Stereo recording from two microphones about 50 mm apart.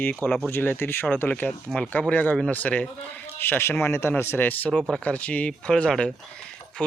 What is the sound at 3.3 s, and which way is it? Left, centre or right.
Speech, left.